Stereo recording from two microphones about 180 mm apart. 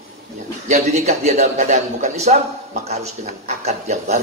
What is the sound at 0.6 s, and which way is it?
A man's voice, 40° right (ahead or behind).